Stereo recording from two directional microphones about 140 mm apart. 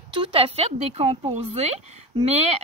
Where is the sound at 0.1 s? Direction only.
40° right (ahead or behind).